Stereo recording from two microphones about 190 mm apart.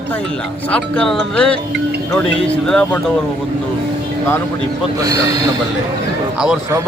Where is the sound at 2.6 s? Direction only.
5° left (ahead or behind).